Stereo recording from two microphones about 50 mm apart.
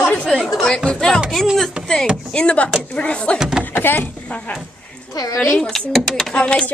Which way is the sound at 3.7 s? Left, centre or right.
Left.